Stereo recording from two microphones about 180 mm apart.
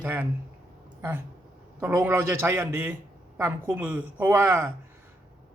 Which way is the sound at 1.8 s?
15° right (ahead or behind).